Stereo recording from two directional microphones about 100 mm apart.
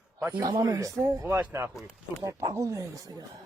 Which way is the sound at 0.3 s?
40° right (ahead or behind).